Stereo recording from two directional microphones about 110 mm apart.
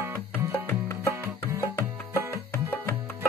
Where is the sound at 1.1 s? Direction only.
20° right (ahead or behind).